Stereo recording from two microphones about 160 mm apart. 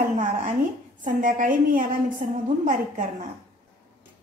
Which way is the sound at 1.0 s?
55° right (ahead or behind).